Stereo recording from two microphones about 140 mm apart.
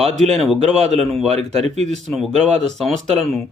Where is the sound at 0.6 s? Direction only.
55° right (ahead or behind).